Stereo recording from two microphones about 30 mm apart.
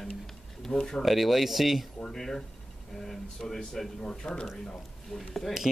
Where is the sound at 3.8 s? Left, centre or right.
Centre.